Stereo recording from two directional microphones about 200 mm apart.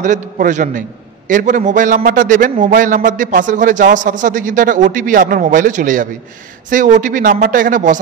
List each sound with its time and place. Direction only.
0.0 s a man's voice: 40° right (ahead or behind)